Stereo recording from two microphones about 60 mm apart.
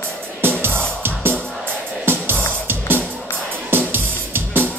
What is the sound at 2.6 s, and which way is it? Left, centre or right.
Music, right.